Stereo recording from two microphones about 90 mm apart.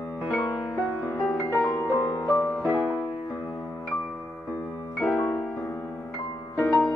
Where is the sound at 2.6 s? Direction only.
Centre (ahead or behind).